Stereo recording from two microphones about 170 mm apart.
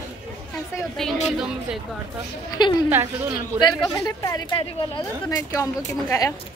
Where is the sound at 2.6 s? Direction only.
25° left (ahead or behind).